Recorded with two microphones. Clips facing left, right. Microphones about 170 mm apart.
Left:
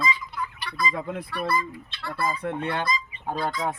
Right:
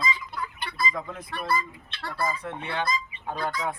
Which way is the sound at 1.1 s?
60° left (ahead or behind).